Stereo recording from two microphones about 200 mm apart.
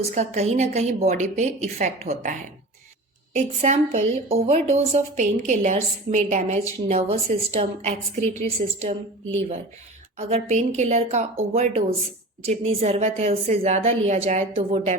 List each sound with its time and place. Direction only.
0.1 s a woman's voice: 35° right (ahead or behind)
10.2 s a woman's voice: 35° right (ahead or behind)